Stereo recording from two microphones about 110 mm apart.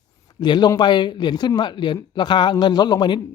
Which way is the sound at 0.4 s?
45° left (ahead or behind).